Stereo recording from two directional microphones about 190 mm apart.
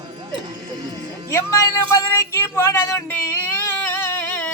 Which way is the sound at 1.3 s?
15° left (ahead or behind).